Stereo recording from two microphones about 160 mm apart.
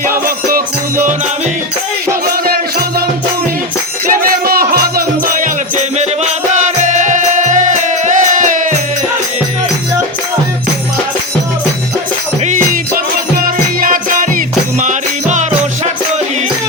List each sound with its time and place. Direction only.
0.3 s music: 60° right (ahead or behind)
2.2 s music: 70° right (ahead or behind)
4.1 s music: 65° right (ahead or behind)
13.4 s music: 60° right (ahead or behind)